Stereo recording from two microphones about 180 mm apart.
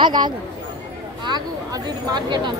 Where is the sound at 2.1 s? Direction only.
25° right (ahead or behind).